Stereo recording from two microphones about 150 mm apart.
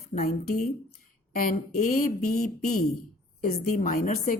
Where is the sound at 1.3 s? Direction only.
70° left (ahead or behind).